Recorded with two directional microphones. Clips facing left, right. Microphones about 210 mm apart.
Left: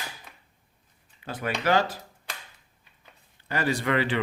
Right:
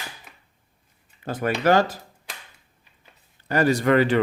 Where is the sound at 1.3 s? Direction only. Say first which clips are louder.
Right 6 dB; 45° right (ahead or behind).